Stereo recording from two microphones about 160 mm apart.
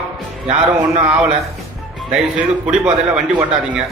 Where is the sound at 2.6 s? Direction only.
5° right (ahead or behind).